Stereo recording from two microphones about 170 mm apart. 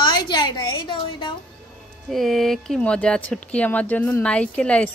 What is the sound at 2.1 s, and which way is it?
Speech, centre (ahead or behind).